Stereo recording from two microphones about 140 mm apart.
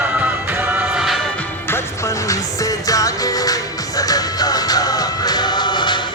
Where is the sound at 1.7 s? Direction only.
25° left (ahead or behind).